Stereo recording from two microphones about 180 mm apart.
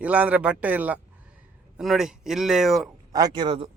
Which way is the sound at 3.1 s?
25° right (ahead or behind).